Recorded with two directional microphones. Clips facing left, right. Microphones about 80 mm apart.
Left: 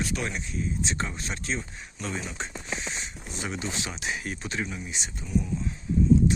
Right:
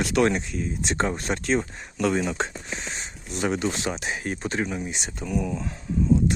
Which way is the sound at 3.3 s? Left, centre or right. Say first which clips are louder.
Right 8 dB; right.